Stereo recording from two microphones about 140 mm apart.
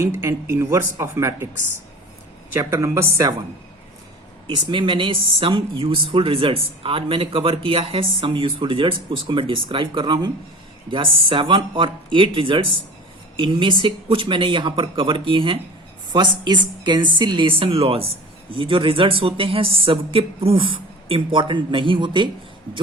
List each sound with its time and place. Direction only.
0.0 s speech: 20° right (ahead or behind)
4.4 s speech: 35° right (ahead or behind)